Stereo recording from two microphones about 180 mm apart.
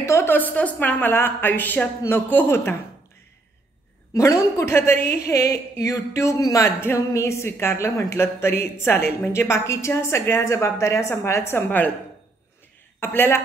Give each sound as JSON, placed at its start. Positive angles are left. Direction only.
{"t": 0.0, "sound": "speech", "side_deg": 15}
{"t": 4.1, "sound": "speech", "side_deg": 15}
{"t": 13.0, "sound": "speech", "side_deg": 10}